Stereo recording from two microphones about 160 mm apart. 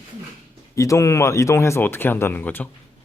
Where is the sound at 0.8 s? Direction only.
20° left (ahead or behind).